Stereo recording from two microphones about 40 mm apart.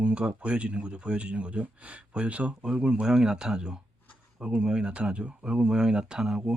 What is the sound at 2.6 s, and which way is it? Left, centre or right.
Speech, right.